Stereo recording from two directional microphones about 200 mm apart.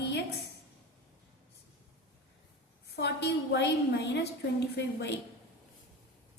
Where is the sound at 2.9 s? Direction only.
55° left (ahead or behind).